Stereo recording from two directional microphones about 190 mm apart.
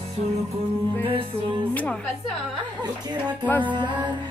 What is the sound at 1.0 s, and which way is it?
Speech, 30° right (ahead or behind).